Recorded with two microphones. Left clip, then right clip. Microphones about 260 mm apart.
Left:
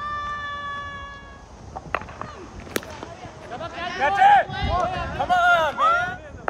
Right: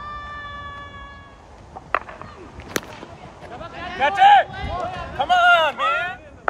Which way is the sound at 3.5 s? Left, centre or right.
Left.